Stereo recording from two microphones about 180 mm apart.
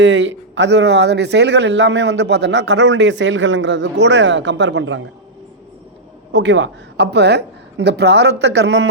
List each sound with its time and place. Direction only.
0.0 s speech: 85° right
6.3 s a woman's voice: 80° right